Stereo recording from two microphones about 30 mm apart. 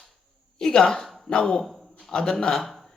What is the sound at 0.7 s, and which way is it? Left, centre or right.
Speech, left.